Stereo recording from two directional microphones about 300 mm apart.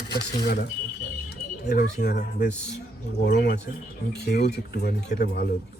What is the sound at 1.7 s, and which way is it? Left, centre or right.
Speech, left.